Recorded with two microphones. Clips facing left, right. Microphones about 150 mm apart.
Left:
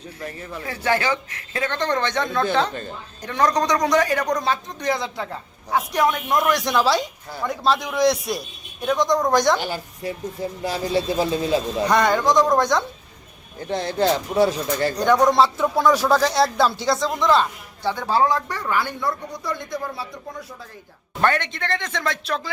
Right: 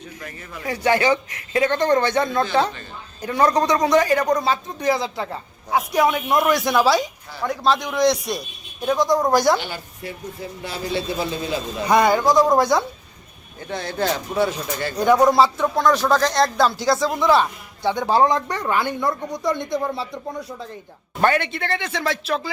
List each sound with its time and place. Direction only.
0.7 s a man's voice: 15° right (ahead or behind)
9.6 s speech: 40° left (ahead or behind)
11.9 s speech: 10° right (ahead or behind)
13.6 s speech: 30° left (ahead or behind)
14.9 s speech: 5° right (ahead or behind); by 20.1 s 25° right (ahead or behind)
21.2 s speech: 10° right (ahead or behind)